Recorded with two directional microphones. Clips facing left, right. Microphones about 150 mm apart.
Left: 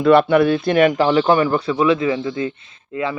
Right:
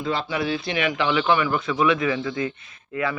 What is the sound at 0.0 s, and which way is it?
A man's voice, 65° left (ahead or behind).